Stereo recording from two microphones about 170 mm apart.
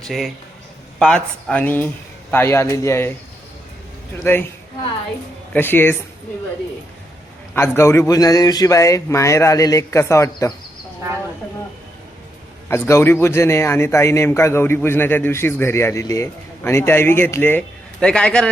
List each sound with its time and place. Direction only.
0.0 s a man's voice: centre (ahead or behind); by 3.1 s 15° left (ahead or behind)
4.2 s a man's voice: 15° left (ahead or behind)
5.5 s a man's voice: 10° left (ahead or behind)
7.5 s a man's voice: 15° left (ahead or behind)
12.6 s a man's voice: 15° left (ahead or behind)